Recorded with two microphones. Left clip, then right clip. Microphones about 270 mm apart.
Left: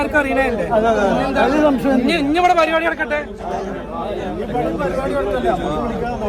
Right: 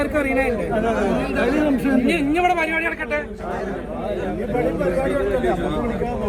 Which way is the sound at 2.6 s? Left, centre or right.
Left.